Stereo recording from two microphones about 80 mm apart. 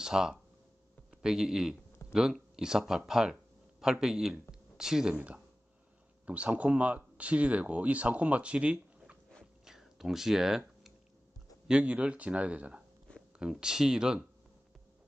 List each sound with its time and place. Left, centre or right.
0.0 s speech: centre
9.7 s a sound: centre
11.6 s speech: centre